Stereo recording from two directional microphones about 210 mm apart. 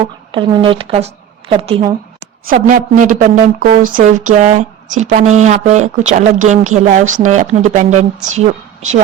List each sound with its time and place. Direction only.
0.0 s a woman's voice: 25° right (ahead or behind)
2.5 s a woman's voice: 40° right (ahead or behind)